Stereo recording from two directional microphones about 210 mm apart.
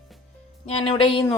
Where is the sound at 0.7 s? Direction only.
25° left (ahead or behind).